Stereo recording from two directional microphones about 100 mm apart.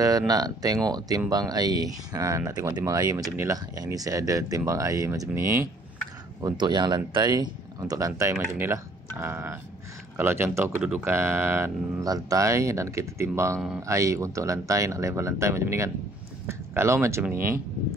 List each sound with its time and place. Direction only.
0.3 s speech: 40° right (ahead or behind)
6.4 s speech: 50° right (ahead or behind)
8.3 s speech: 20° right (ahead or behind)